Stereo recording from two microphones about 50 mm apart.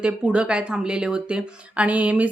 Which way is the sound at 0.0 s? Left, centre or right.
Right.